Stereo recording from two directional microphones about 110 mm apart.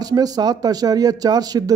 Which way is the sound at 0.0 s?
35° right (ahead or behind).